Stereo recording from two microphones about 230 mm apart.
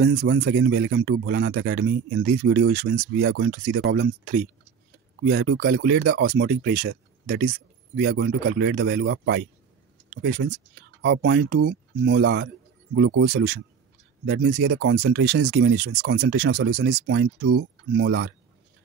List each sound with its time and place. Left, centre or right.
0.0 s speech: right